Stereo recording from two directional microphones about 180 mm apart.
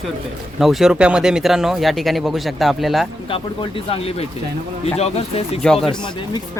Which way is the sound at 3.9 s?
35° left (ahead or behind).